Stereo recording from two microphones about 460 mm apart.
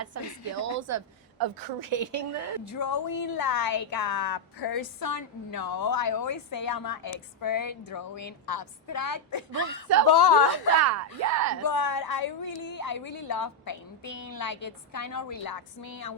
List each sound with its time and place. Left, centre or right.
0.1 s speech: right
1.4 s a woman's voice: right
2.7 s a woman's voice: left
10.2 s a woman's voice: left
10.8 s speech: right
11.6 s a woman's voice: left